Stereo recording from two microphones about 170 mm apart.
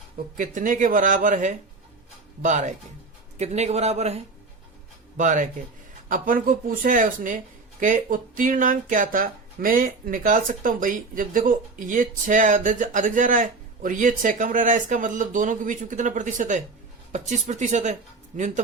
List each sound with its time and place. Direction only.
0.3 s a man's voice: 50° right (ahead or behind)